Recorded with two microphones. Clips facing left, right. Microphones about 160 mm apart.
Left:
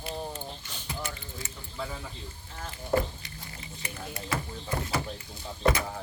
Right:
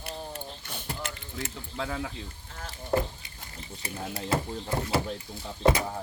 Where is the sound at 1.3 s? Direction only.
75° right (ahead or behind).